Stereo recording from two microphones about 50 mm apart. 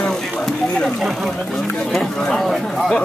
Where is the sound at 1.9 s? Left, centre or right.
Centre.